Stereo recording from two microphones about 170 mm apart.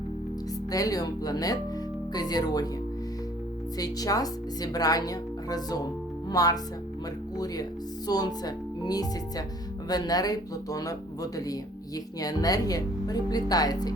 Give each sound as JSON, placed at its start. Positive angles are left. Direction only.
{"t": 0.7, "sound": "speech", "side_deg": 20}
{"t": 3.8, "sound": "speech", "side_deg": 20}